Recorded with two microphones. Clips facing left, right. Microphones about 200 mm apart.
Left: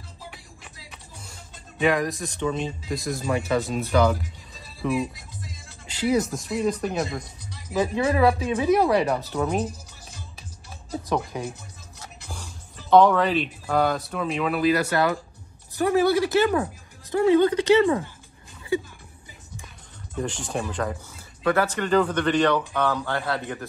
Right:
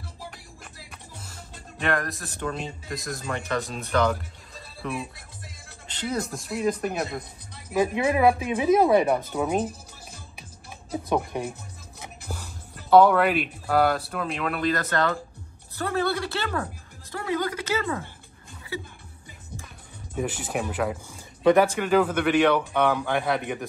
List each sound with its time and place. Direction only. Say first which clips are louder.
1.8 s speech: left 5 dB; centre (ahead or behind)
5.1 s music: left 5 dB; 60° right (ahead or behind)
5.9 s speech: left 7 dB; 5° left (ahead or behind)
7.8 s speech: even; 15° right (ahead or behind)
9.3 s speech: even; 5° right (ahead or behind)
12.7 s speech: even; 5° right (ahead or behind); by 17.9 s 30° left (ahead or behind)
20.2 s speech: even; 5° right (ahead or behind)